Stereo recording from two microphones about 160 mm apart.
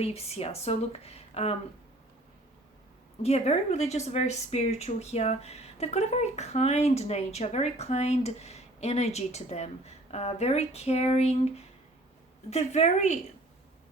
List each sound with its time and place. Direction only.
0.0 s speech: 40° left (ahead or behind)
3.2 s speech: 40° left (ahead or behind)